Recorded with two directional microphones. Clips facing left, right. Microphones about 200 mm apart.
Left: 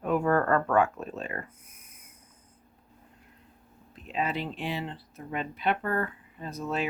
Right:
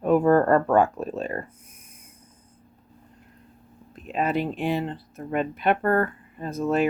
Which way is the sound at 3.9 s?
50° right (ahead or behind).